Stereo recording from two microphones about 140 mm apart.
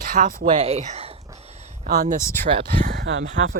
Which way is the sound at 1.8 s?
90° right.